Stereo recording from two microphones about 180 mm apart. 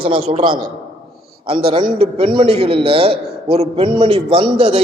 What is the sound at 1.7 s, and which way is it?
A man's voice, 30° right (ahead or behind).